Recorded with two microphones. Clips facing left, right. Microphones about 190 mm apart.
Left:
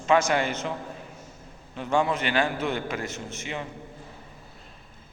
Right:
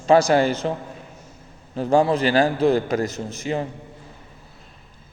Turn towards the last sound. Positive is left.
turn(degrees=-35)  # may be behind; listen again after turning